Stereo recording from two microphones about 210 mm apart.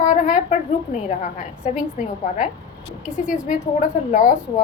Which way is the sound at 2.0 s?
40° left (ahead or behind).